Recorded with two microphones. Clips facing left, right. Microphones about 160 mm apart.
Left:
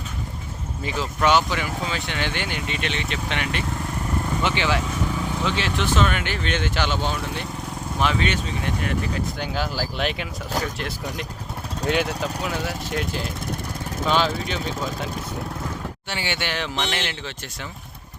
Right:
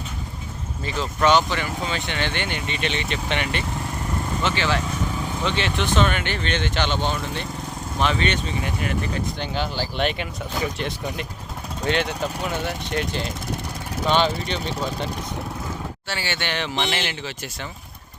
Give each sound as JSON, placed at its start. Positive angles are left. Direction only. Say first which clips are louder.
{"t": 0.9, "sound": "speech", "louder": "right 1 dB", "side_deg": 10}
{"t": 4.4, "sound": "speech", "louder": "right 1 dB", "side_deg": 15}
{"t": 5.5, "sound": "speech", "louder": "right 2 dB", "side_deg": 0}
{"t": 16.0, "sound": "speech", "louder": "left 1 dB", "side_deg": 15}
{"t": 16.5, "sound": "speech", "louder": "right 1 dB", "side_deg": 0}